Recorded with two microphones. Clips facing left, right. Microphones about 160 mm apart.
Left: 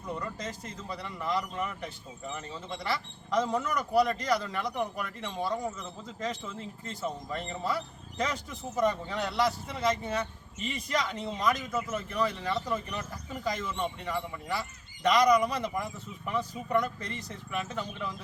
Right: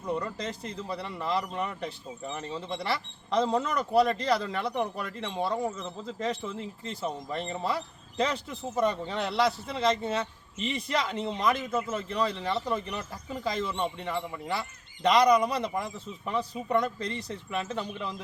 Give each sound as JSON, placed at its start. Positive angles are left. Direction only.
{"t": 0.2, "sound": "speech", "side_deg": -30}
{"t": 6.8, "sound": "speech", "side_deg": -20}